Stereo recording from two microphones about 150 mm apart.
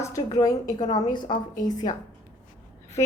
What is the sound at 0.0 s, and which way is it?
A woman's voice, 20° left (ahead or behind).